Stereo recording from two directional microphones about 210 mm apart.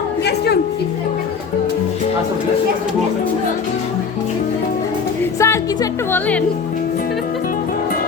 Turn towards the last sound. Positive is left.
turn(degrees=10)  # may be behind; listen again after turning